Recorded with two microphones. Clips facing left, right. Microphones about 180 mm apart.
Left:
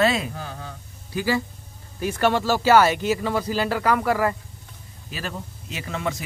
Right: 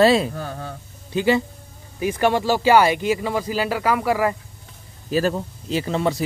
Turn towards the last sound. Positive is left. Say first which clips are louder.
# right 7 dB
turn(degrees=-35)  # may be behind; listen again after turning